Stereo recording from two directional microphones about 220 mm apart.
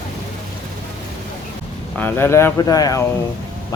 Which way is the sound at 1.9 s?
10° left (ahead or behind).